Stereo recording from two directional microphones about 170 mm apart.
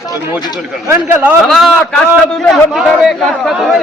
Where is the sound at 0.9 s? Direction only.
10° right (ahead or behind).